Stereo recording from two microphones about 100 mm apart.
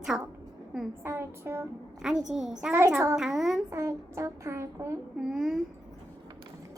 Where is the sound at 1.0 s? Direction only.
25° right (ahead or behind).